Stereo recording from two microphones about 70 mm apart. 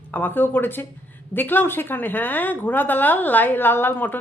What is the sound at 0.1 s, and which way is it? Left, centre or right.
A woman's voice, left.